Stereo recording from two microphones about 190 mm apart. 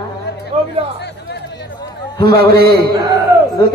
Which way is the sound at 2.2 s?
55° right (ahead or behind).